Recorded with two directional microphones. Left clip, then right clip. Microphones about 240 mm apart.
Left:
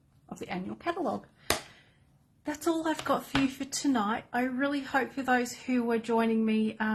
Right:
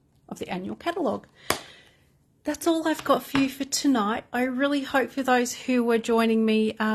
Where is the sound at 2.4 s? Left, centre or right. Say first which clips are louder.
Right 6 dB; right.